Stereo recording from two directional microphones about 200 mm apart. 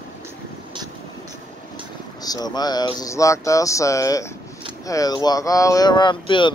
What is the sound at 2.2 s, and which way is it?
Speech, 20° left (ahead or behind).